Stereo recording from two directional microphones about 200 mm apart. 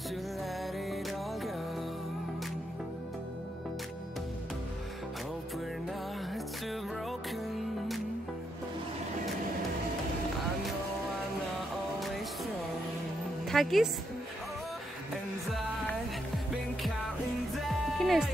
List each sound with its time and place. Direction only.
6.3 s music: centre (ahead or behind)
13.5 s speech: centre (ahead or behind)
17.9 s music: centre (ahead or behind)